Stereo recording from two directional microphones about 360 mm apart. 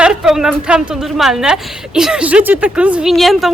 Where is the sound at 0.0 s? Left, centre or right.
Centre.